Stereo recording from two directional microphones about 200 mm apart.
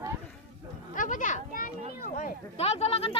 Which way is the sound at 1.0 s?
40° left (ahead or behind).